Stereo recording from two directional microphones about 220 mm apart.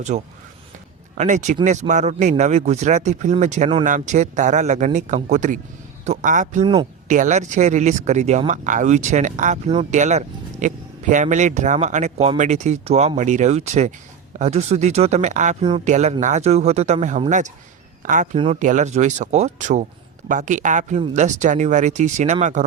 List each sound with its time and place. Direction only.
0.1 s speech: 35° right (ahead or behind)